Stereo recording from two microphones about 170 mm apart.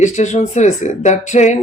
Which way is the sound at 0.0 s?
45° left (ahead or behind).